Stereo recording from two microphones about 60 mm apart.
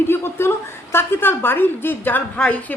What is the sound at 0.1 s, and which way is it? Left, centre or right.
A woman's voice, left.